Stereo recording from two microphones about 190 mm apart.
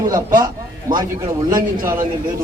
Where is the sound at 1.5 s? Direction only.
45° right (ahead or behind).